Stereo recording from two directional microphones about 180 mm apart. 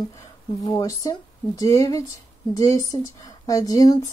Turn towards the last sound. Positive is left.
turn(degrees=20)  # may be behind; listen again after turning